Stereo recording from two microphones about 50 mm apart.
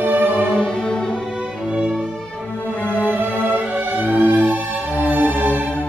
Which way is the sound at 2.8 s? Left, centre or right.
Left.